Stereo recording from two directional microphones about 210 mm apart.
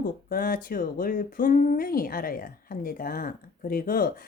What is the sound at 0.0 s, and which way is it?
Speech, 45° left (ahead or behind).